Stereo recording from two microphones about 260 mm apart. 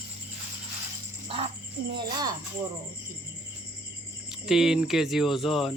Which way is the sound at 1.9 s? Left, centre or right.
Centre.